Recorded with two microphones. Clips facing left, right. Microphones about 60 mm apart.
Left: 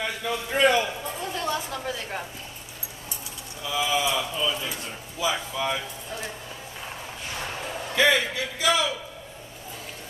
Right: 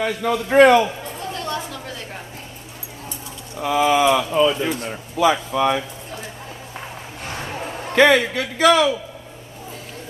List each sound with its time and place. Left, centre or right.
0.0 s speech: right
1.3 s a sound: centre
3.6 s speech: right
7.9 s speech: right